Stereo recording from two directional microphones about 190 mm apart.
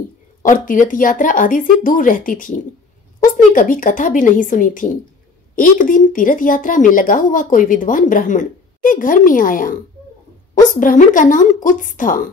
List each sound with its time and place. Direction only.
0.4 s a woman's voice: 45° left (ahead or behind)